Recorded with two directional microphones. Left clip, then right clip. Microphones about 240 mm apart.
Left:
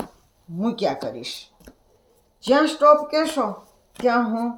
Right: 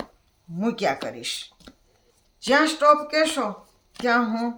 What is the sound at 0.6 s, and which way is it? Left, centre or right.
Speech, right.